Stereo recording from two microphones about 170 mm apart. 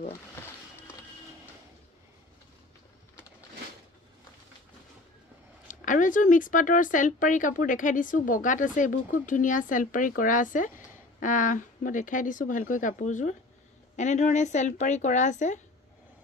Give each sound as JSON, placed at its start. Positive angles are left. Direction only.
{"t": 5.7, "sound": "speech", "side_deg": 50}